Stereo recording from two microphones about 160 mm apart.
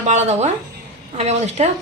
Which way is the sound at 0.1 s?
45° right (ahead or behind).